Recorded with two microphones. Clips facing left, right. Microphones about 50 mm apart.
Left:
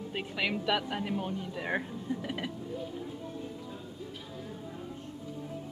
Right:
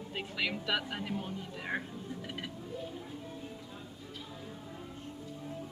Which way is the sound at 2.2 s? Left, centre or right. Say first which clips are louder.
Left 5 dB; centre.